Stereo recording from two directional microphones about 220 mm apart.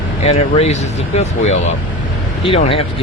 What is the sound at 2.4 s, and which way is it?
Speech, 25° left (ahead or behind).